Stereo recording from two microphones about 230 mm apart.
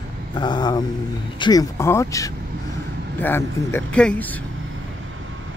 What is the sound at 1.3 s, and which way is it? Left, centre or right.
A man's voice, centre.